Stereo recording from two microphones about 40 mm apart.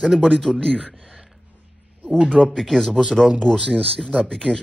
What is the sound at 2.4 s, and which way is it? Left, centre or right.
Speech, centre.